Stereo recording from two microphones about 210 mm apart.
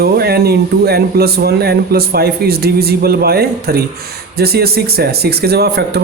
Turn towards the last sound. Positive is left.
turn(degrees=-50)  # may be behind; listen again after turning